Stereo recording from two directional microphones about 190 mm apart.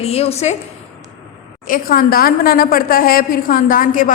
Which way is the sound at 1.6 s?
45° left (ahead or behind).